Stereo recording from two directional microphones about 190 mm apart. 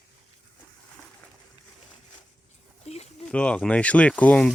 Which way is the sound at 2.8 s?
35° left (ahead or behind).